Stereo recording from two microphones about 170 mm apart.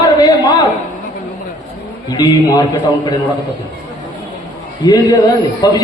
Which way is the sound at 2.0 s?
25° left (ahead or behind).